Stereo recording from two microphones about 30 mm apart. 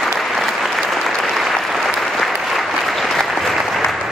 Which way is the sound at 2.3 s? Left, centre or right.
Centre.